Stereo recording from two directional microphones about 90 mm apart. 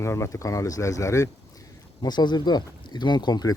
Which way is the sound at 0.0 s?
30° left (ahead or behind).